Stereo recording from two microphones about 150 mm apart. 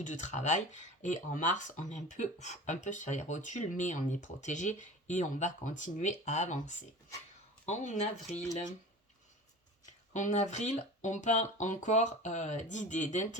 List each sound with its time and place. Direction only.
0.0 s speech: 55° left (ahead or behind)
10.1 s speech: 55° left (ahead or behind)